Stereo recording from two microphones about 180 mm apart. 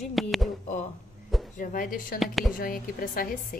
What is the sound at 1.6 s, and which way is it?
Speech, 50° left (ahead or behind).